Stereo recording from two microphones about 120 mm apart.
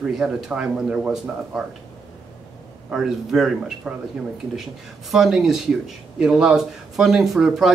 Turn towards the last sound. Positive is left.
turn(degrees=0)  # may be behind; listen again after turning